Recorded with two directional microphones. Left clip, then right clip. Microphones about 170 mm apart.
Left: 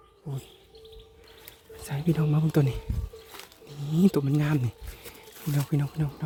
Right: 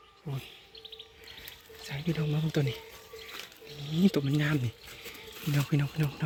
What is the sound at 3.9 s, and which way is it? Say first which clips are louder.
Speech: left 4 dB; 50° left (ahead or behind).